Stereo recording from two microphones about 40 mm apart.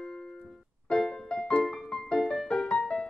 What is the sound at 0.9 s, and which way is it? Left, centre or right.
Music, centre.